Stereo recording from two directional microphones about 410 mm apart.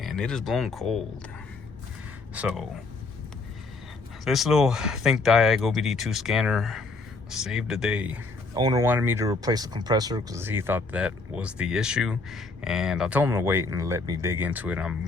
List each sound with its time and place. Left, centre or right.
0.0 s speech: centre
2.3 s speech: centre
4.3 s speech: centre